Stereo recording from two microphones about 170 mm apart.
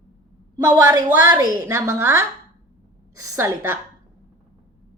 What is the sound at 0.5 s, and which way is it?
A woman's voice, 20° right (ahead or behind).